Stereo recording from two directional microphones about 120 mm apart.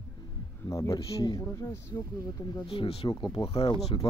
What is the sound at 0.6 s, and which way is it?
Speech, 25° left (ahead or behind).